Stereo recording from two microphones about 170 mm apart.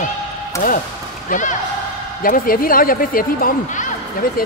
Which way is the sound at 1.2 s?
50° left (ahead or behind).